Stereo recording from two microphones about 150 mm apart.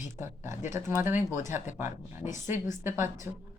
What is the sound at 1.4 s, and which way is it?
A woman's voice, 55° left (ahead or behind).